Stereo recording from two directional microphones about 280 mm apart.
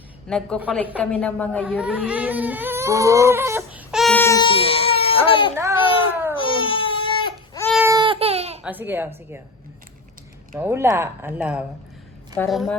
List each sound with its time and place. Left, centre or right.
0.3 s a woman's voice: centre
6.3 s baby cry: centre
7.7 s baby cry: centre
8.6 s speech: centre
10.5 s a woman's voice: centre